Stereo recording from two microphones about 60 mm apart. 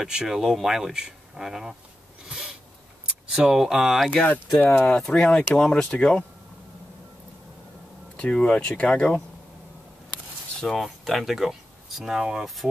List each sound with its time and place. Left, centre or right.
0.0 s speech: centre
3.3 s speech: centre
4.7 s speech: centre
5.0 s speech: centre
8.2 s speech: centre
10.6 s speech: centre